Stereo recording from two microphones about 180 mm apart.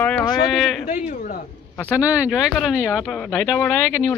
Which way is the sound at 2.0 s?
5° right (ahead or behind).